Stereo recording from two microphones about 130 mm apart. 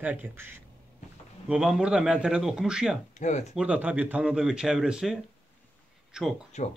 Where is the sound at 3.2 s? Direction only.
65° left (ahead or behind).